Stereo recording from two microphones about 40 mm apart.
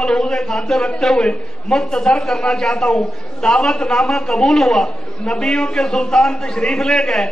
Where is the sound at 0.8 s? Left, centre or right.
Centre.